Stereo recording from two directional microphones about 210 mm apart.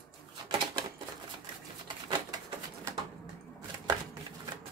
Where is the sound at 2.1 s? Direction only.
20° right (ahead or behind).